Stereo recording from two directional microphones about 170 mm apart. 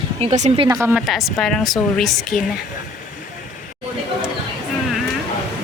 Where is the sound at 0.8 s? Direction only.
Centre (ahead or behind).